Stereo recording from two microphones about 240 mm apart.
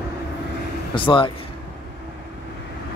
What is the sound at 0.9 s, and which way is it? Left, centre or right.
Speech, left.